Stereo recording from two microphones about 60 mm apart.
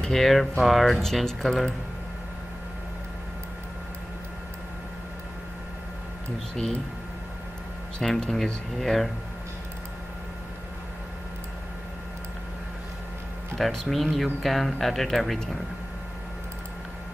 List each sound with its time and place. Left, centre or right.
0.0 s speech: centre
6.5 s speech: centre
8.0 s speech: centre
13.6 s speech: centre